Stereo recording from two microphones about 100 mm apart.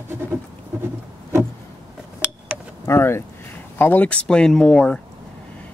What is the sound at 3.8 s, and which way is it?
Speech, 20° left (ahead or behind).